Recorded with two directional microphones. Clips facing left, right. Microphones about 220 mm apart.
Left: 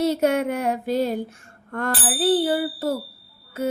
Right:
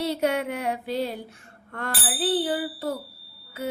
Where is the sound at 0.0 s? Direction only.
45° left (ahead or behind).